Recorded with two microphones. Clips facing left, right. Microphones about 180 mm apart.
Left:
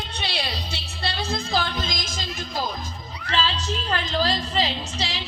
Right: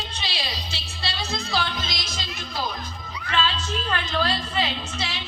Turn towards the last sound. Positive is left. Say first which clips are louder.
# left 1 dB
turn(degrees=35)  # may be behind; listen again after turning